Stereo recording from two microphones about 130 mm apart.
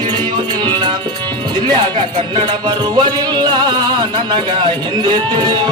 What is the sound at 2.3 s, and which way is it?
Music, 35° right (ahead or behind).